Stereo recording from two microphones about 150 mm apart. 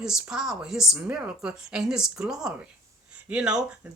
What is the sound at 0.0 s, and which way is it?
A woman's voice, 5° right (ahead or behind).